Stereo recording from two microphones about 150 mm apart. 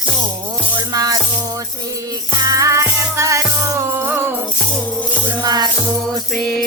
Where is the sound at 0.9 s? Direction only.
25° right (ahead or behind).